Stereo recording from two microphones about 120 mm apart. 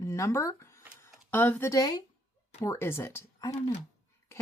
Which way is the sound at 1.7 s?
30° left (ahead or behind).